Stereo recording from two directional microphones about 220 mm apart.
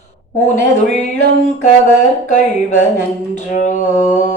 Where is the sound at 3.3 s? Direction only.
35° left (ahead or behind).